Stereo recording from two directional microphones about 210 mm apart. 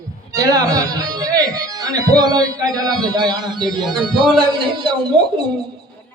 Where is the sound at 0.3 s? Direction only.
15° right (ahead or behind).